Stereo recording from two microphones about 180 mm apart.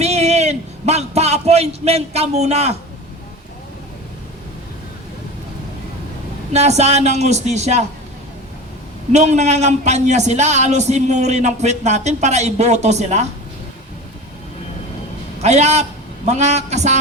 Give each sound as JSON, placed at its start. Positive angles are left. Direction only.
{"t": 0.0, "sound": "a sound", "side_deg": -35}
{"t": 6.5, "sound": "a man's voice", "side_deg": -35}
{"t": 9.1, "sound": "a man's voice", "side_deg": -40}
{"t": 15.4, "sound": "a man's voice", "side_deg": -40}